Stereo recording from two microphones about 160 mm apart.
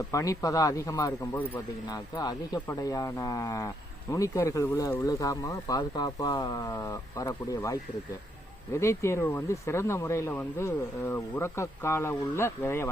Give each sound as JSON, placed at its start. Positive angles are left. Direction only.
{"t": 0.1, "sound": "speech", "side_deg": 20}